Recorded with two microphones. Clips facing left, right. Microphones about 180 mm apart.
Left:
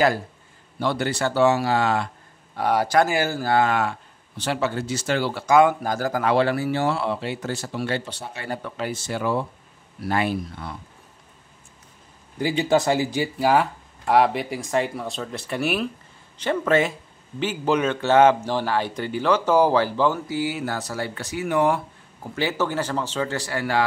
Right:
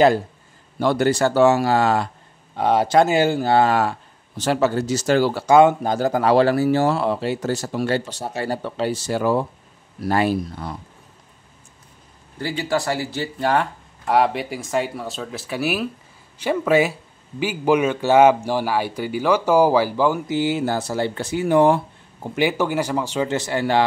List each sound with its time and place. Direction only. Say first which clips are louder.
0.7 s speech: right 6 dB; 45° right (ahead or behind)
2.5 s speech: right 3 dB; 20° right (ahead or behind); by 5.6 s 40° right (ahead or behind)
5.6 s speech: right 3 dB; 25° right (ahead or behind)
6.2 s speech: right 5 dB; 40° right (ahead or behind)
12.4 s speech: left 3 dB; 20° left (ahead or behind); by 20.3 s 10° right (ahead or behind)
20.3 s speech: right 5 dB; 25° right (ahead or behind)
22.3 s speech: right 4 dB; 15° right (ahead or behind)